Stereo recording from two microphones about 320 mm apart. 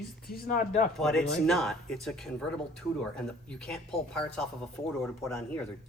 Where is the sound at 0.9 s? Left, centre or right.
Centre.